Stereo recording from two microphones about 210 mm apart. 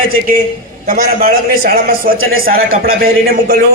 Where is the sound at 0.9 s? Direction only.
40° right (ahead or behind).